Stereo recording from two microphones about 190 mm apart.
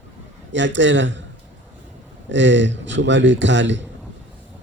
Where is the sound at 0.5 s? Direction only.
70° right (ahead or behind).